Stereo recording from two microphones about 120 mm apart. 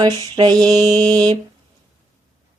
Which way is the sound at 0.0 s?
35° right (ahead or behind).